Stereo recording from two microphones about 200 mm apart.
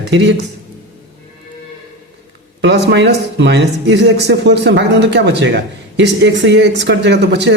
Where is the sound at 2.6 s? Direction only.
60° right (ahead or behind).